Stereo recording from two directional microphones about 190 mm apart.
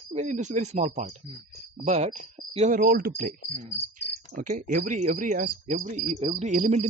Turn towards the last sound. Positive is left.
turn(degrees=-40)  # may be behind; listen again after turning